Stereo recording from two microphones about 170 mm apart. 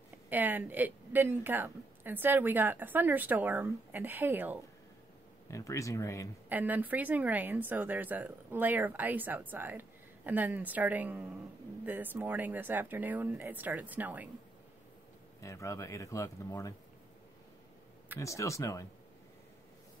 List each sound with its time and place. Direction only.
0.3 s speech: 10° right (ahead or behind)
5.5 s speech: 20° left (ahead or behind)
6.5 s speech: 10° right (ahead or behind)
15.4 s speech: 20° left (ahead or behind)
18.1 s speech: 20° left (ahead or behind)